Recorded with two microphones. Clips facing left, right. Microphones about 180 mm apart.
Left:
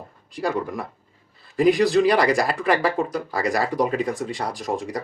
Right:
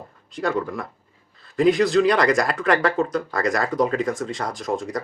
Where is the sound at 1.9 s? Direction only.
10° left (ahead or behind).